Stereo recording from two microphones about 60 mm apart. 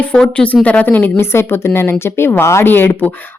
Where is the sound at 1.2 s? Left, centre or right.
Left.